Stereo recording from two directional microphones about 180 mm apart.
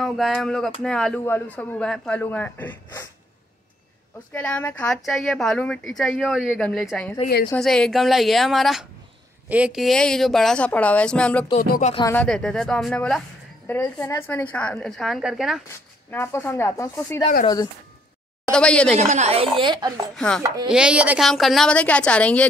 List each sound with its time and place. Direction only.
0.0 s a woman's voice: centre (ahead or behind)
4.3 s a woman's voice: 10° left (ahead or behind)
4.9 s a woman's voice: centre (ahead or behind)
13.7 s a woman's voice: 15° left (ahead or behind)
16.1 s a woman's voice: 15° left (ahead or behind)
18.5 s a woman's voice: 5° left (ahead or behind)
18.9 s a woman's voice: 40° right (ahead or behind)
20.2 s a woman's voice: 5° left (ahead or behind)
20.7 s a woman's voice: 5° right (ahead or behind)